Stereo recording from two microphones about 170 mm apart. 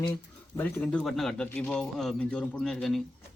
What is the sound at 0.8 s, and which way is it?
Speech, 5° left (ahead or behind).